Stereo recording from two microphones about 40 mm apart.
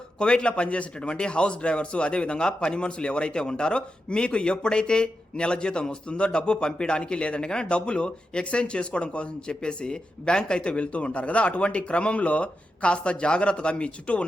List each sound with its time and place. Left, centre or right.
0.2 s a man's voice: left